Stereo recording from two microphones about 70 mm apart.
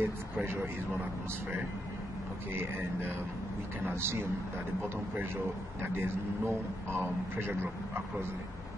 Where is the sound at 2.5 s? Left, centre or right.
Right.